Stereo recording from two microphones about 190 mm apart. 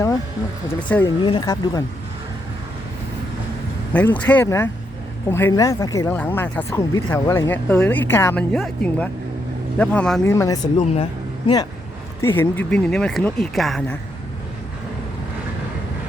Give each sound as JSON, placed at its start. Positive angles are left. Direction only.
{"t": 0.9, "sound": "speech", "side_deg": 10}
{"t": 1.2, "sound": "speech", "side_deg": 20}
{"t": 3.9, "sound": "speech", "side_deg": 10}
{"t": 12.2, "sound": "speech", "side_deg": 10}